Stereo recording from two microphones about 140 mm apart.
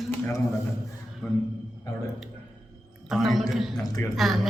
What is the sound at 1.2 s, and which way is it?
Speech, 15° left (ahead or behind).